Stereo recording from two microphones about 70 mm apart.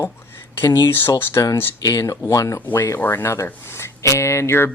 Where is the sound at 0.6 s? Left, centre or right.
Left.